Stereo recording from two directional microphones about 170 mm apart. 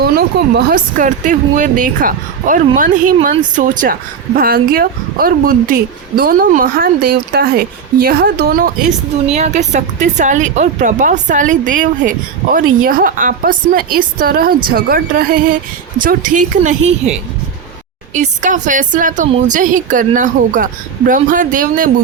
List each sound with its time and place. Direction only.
0.0 s speech: 65° right (ahead or behind)
9.3 s speech: 40° right (ahead or behind)